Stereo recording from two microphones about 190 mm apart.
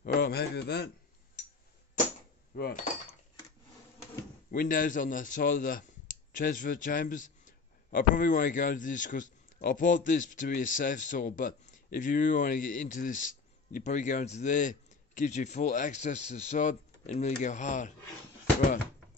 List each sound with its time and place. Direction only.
0.0 s a man's voice: 55° left (ahead or behind)
2.5 s speech: 55° left (ahead or behind)
4.5 s a man's voice: 45° left (ahead or behind)